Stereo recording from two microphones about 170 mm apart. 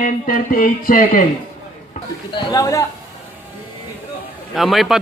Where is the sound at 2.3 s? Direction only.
20° left (ahead or behind).